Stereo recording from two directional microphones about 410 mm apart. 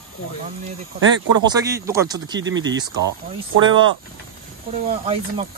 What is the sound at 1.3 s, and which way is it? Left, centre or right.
Speech, centre.